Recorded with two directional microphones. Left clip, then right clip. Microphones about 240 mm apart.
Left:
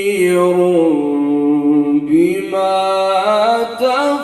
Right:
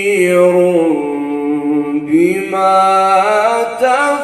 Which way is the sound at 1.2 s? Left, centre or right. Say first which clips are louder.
Left 2 dB; left.